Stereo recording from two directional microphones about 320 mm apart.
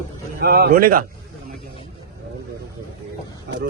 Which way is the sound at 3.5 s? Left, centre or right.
Right.